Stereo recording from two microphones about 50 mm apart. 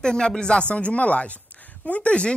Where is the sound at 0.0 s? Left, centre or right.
Centre.